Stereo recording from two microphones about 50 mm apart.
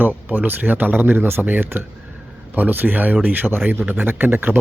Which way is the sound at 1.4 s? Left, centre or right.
Right.